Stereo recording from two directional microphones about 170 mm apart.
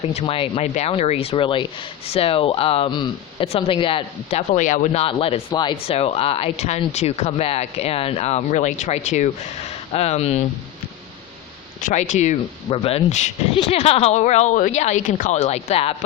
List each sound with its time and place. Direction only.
0.1 s speech: 35° left (ahead or behind)
11.8 s speech: 45° left (ahead or behind)